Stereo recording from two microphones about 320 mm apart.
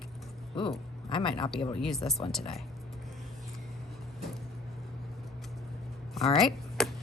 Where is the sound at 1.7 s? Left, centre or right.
Centre.